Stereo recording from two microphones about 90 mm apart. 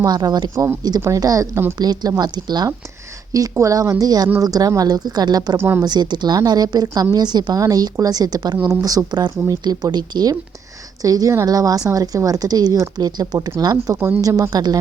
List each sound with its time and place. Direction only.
0.0 s a woman's voice: 50° right (ahead or behind)
0.5 s a woman's voice: 30° right (ahead or behind)
0.8 s a woman's voice: 45° right (ahead or behind)
3.5 s a woman's voice: 35° right (ahead or behind)
5.5 s a woman's voice: 25° right (ahead or behind)
5.8 s a woman's voice: 55° right (ahead or behind)
11.0 s a woman's voice: 40° right (ahead or behind)